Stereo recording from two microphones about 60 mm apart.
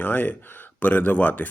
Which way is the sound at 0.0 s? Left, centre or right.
Left.